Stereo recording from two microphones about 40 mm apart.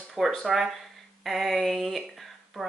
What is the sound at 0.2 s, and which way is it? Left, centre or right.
Speech, centre.